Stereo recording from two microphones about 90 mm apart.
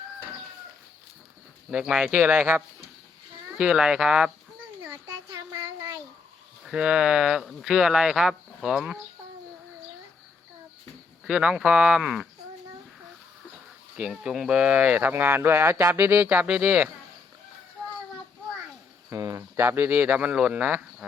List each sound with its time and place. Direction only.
1.7 s speech: 5° right (ahead or behind)
4.8 s a sound: 30° right (ahead or behind)
6.7 s speech: 10° right (ahead or behind)
11.3 s speech: 10° right (ahead or behind)
13.9 s speech: 10° right (ahead or behind)
19.1 s speech: 35° right (ahead or behind); by 20.8 s 15° right (ahead or behind)